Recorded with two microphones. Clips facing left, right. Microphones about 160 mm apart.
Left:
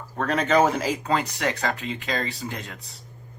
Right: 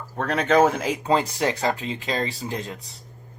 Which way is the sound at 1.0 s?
25° right (ahead or behind).